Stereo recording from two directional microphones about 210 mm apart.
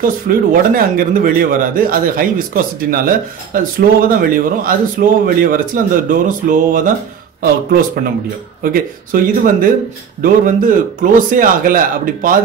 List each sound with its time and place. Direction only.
0.3 s a man's voice: 45° right (ahead or behind)